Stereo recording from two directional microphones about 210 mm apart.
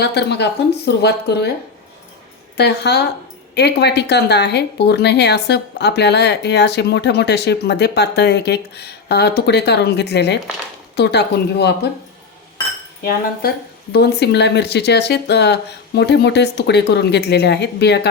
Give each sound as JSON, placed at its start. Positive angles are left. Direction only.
{"t": 0.0, "sound": "speech", "side_deg": 55}
{"t": 2.6, "sound": "speech", "side_deg": 50}
{"t": 13.0, "sound": "speech", "side_deg": 45}